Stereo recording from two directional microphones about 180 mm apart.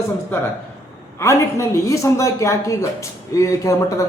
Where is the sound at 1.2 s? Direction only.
15° left (ahead or behind).